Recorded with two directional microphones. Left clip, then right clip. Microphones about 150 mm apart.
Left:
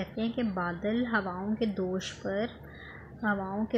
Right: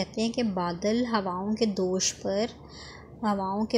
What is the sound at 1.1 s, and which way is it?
Speech, 15° right (ahead or behind).